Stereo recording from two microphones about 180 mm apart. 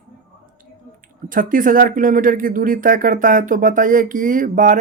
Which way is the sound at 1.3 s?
50° right (ahead or behind).